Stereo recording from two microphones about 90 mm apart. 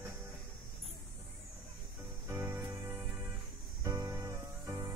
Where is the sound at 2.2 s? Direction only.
25° right (ahead or behind).